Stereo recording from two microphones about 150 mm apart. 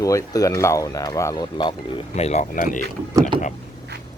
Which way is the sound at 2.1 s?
50° left (ahead or behind).